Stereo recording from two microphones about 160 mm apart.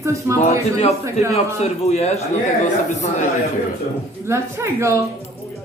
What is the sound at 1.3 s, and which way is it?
Speech, 40° left (ahead or behind).